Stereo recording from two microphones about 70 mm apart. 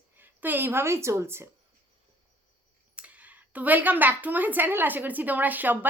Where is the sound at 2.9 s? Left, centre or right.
Centre.